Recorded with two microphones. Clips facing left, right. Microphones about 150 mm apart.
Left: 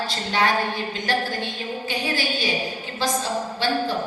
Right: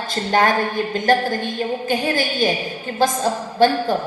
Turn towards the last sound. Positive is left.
turn(degrees=-50)  # may be behind; listen again after turning